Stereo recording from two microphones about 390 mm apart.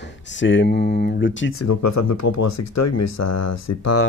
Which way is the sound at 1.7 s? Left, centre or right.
Left.